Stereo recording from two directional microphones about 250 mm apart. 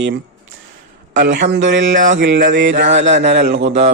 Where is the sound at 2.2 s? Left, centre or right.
Right.